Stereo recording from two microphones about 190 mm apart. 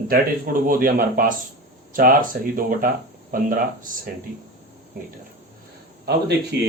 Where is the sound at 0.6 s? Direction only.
45° right (ahead or behind).